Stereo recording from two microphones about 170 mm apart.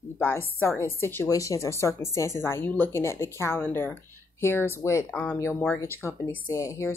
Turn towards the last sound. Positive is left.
turn(degrees=15)  # may be behind; listen again after turning